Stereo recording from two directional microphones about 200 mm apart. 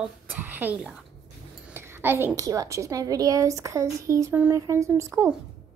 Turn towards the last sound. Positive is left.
turn(degrees=-15)  # may be behind; listen again after turning